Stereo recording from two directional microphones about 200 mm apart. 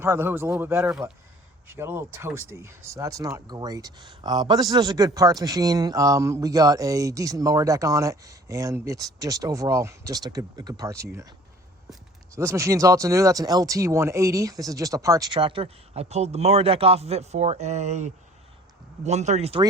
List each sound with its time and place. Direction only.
0.0 s speech: 10° right (ahead or behind)
12.3 s speech: 15° right (ahead or behind); by 19.6 s 30° right (ahead or behind)